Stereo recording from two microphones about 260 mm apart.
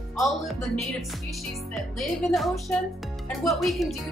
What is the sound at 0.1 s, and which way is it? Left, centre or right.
Speech, centre.